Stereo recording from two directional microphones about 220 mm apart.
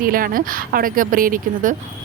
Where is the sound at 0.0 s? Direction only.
40° right (ahead or behind).